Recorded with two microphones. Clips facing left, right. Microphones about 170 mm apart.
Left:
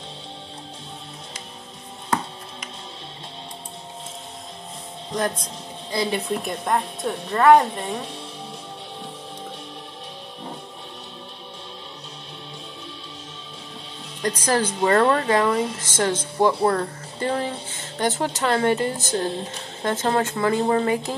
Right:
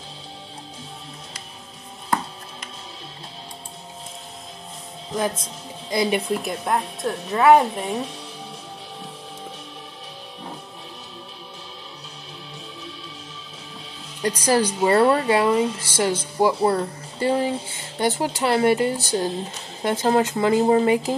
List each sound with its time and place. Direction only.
5.1 s speech: 5° right (ahead or behind)
14.2 s speech: 10° right (ahead or behind)